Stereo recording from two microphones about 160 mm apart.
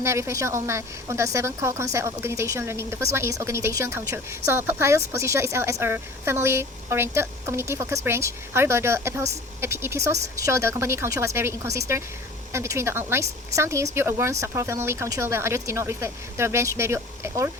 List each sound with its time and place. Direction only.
0.0 s speech: 15° right (ahead or behind)